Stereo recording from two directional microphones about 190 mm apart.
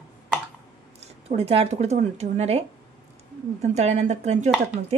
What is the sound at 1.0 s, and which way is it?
A woman's voice, 35° right (ahead or behind).